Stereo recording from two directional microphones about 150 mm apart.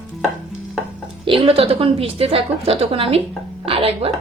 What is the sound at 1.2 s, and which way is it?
Speech, 35° right (ahead or behind).